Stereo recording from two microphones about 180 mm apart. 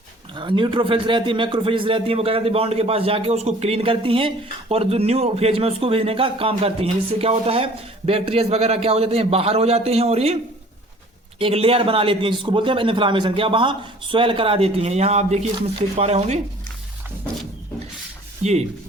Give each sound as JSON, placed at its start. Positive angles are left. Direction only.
{"t": 0.3, "sound": "speech", "side_deg": -25}
{"t": 11.3, "sound": "a man's voice", "side_deg": -30}